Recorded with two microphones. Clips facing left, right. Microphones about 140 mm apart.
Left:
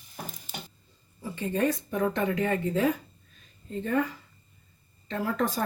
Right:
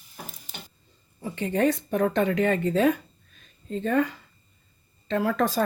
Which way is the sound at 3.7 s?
90° right.